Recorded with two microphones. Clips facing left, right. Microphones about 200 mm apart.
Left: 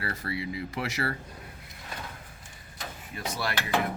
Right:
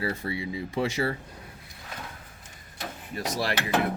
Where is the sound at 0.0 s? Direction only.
25° right (ahead or behind).